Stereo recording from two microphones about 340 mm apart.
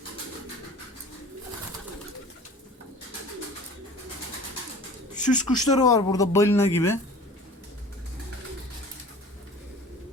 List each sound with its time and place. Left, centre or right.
5.1 s speech: left
5.7 s speech: centre